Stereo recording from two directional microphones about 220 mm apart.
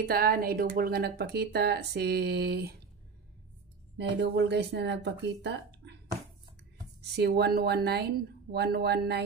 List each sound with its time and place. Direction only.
0.0 s speech: 45° right (ahead or behind)
4.2 s speech: 50° right (ahead or behind)
7.0 s speech: 45° right (ahead or behind)